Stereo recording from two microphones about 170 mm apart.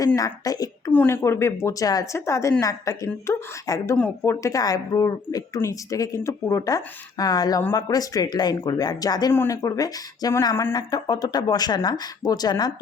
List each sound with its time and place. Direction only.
0.2 s a woman's voice: 20° left (ahead or behind)